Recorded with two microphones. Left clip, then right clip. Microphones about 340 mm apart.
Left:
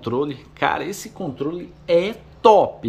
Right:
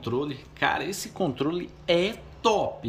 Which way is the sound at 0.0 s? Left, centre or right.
Centre.